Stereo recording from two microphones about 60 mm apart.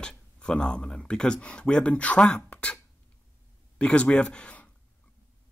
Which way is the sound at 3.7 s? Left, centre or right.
Left.